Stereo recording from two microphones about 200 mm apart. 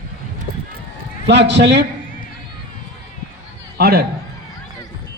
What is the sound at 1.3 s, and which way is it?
Speech, 60° right (ahead or behind).